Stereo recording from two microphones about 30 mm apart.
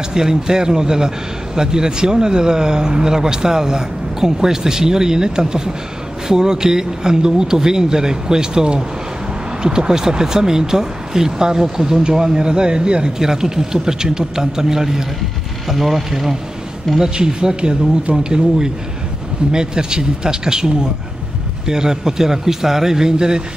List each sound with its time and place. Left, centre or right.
0.1 s a man's voice: right
12.4 s speech: right
13.2 s a man's voice: centre
17.0 s a man's voice: right
19.5 s a man's voice: right